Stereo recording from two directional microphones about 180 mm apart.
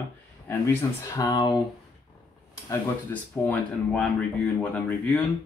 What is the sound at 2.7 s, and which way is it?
Speech, 10° left (ahead or behind).